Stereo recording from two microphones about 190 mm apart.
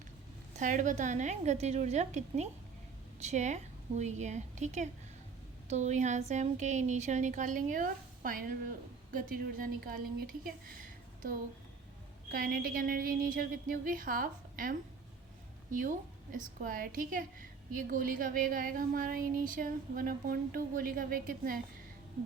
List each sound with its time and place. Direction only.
0.5 s a woman's voice: 40° right (ahead or behind)
12.3 s a woman's voice: 50° right (ahead or behind)